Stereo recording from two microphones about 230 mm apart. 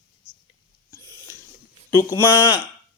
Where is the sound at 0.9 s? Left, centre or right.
Centre.